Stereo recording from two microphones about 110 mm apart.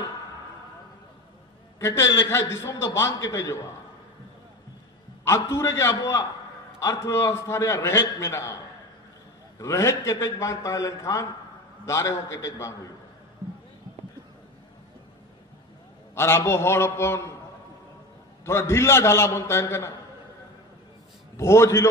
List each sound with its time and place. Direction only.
1.8 s a man's voice: 25° left (ahead or behind)
5.2 s a man's voice: 25° left (ahead or behind)
9.6 s a man's voice: 30° left (ahead or behind)
16.2 s a man's voice: 25° left (ahead or behind)
18.4 s a man's voice: 25° left (ahead or behind)
21.4 s a man's voice: 25° left (ahead or behind)